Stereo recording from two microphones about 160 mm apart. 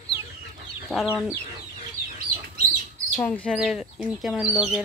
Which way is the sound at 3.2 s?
10° left (ahead or behind).